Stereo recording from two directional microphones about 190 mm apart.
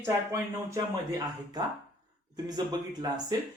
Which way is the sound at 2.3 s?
20° right (ahead or behind).